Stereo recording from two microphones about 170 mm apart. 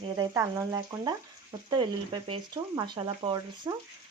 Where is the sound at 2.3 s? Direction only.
25° right (ahead or behind).